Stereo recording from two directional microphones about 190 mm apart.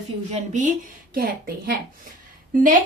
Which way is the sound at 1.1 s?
50° right (ahead or behind).